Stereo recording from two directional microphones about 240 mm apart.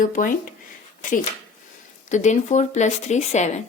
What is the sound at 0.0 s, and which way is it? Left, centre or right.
Speech, left.